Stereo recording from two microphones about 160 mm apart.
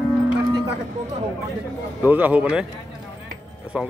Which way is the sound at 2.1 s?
10° right (ahead or behind).